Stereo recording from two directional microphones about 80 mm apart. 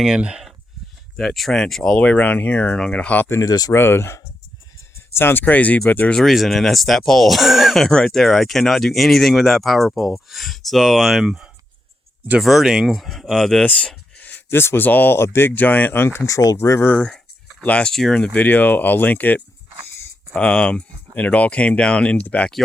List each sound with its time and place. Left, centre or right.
0.0 s speech: centre
1.1 s speech: centre
3.2 s speech: left
6.1 s speech: centre
13.7 s speech: centre; by 16.9 s left
17.6 s speech: centre
18.4 s speech: left